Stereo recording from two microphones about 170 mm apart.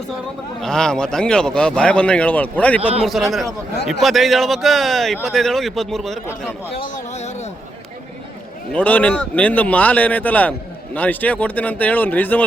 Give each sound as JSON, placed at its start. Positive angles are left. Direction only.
{"t": 0.6, "sound": "speech", "side_deg": 5}
{"t": 7.1, "sound": "a sound", "side_deg": 40}
{"t": 8.7, "sound": "speech", "side_deg": 10}